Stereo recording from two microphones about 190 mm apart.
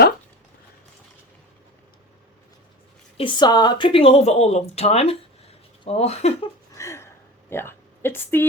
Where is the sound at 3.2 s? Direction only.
25° left (ahead or behind).